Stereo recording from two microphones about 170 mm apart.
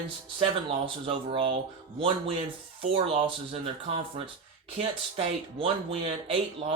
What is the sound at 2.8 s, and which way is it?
Speech, 30° right (ahead or behind).